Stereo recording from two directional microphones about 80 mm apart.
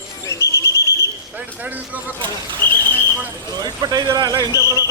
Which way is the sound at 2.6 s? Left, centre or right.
Centre.